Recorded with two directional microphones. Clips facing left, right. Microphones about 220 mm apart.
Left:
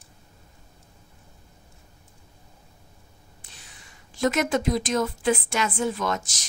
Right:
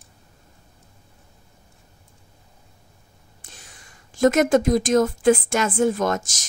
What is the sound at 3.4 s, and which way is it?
Speech, 45° right (ahead or behind).